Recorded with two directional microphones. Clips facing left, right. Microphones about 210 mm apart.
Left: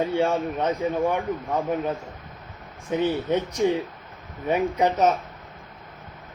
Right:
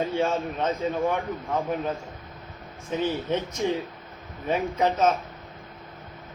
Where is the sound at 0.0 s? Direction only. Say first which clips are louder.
Left 3 dB; 15° left (ahead or behind).